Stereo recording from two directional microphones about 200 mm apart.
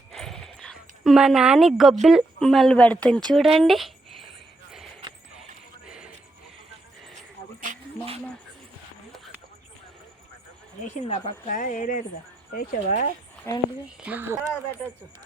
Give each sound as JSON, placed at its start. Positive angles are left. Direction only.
{"t": 0.1, "sound": "speech", "side_deg": 0}
{"t": 5.8, "sound": "music", "side_deg": -5}
{"t": 7.6, "sound": "music", "side_deg": -35}
{"t": 9.1, "sound": "a sound", "side_deg": 0}
{"t": 10.8, "sound": "speech", "side_deg": 35}
{"t": 14.0, "sound": "speech", "side_deg": -10}